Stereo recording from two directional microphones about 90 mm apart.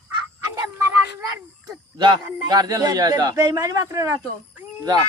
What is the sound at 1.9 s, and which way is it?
Speech, 55° right (ahead or behind).